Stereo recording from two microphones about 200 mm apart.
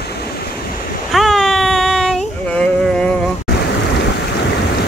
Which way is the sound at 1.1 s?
Centre (ahead or behind).